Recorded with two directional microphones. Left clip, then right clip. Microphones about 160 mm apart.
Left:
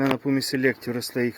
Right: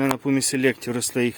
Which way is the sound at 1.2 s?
40° right (ahead or behind).